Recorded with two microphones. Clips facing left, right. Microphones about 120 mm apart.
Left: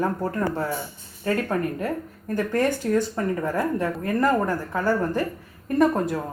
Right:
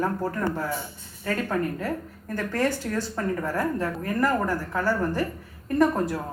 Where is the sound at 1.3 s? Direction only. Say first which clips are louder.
Left 2 dB; 20° left (ahead or behind).